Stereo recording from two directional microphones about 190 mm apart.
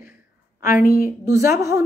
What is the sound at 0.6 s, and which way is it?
Speech, 50° left (ahead or behind).